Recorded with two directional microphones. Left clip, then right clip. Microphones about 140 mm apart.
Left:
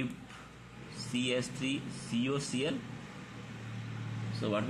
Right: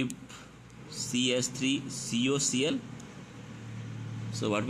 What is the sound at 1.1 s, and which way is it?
Speech, 25° right (ahead or behind).